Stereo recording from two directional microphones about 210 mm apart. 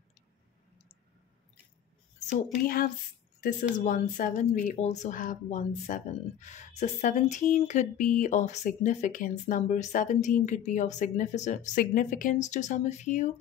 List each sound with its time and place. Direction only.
2.1 s a woman's voice: 40° left (ahead or behind)